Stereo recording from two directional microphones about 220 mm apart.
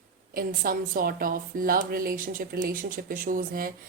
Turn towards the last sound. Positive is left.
turn(degrees=-40)  # may be behind; listen again after turning